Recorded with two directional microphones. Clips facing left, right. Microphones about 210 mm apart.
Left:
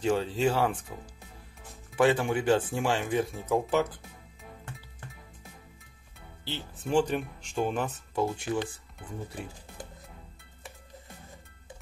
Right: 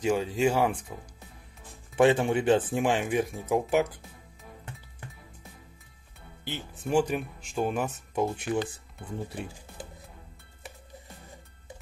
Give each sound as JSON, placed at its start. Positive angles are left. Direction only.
{"t": 0.0, "sound": "speech", "side_deg": -10}
{"t": 2.0, "sound": "speech", "side_deg": -25}
{"t": 6.4, "sound": "speech", "side_deg": -15}